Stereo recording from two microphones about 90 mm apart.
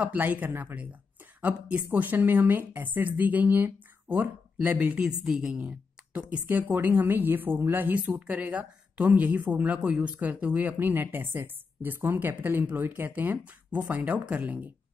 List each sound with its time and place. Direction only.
0.0 s a woman's voice: 15° right (ahead or behind)
5.0 s a woman's voice: 5° right (ahead or behind)